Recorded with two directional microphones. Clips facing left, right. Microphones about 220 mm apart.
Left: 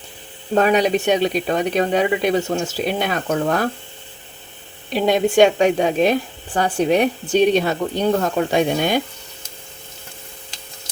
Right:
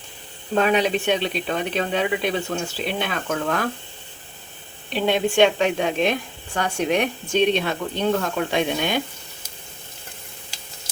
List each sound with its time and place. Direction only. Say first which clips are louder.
0.5 s a woman's voice: left 4 dB; 40° left (ahead or behind)
4.9 s a woman's voice: left 4 dB; 40° left (ahead or behind)